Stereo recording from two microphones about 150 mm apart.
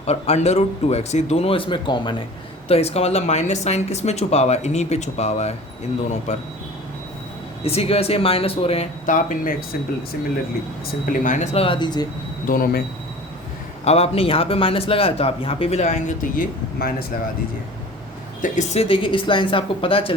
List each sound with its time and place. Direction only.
0.0 s speech: 45° left (ahead or behind)
2.6 s speech: 40° left (ahead or behind)
7.6 s a man's voice: 40° left (ahead or behind)
9.0 s speech: 60° left (ahead or behind)
11.0 s speech: 65° left (ahead or behind)
11.5 s a man's voice: 35° left (ahead or behind)
12.5 s speech: 70° left (ahead or behind)
13.8 s a man's voice: 45° left (ahead or behind); by 16.9 s 60° left (ahead or behind)
18.5 s a man's voice: 45° left (ahead or behind)